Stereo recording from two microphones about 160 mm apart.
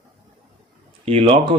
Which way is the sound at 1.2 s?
35° right (ahead or behind).